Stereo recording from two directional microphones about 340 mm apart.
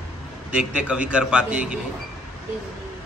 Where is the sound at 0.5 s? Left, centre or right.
Centre.